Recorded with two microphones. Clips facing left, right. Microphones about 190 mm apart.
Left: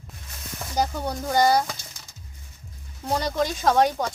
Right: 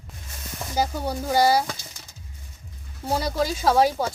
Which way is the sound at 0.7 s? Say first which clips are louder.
Even; 5° right (ahead or behind).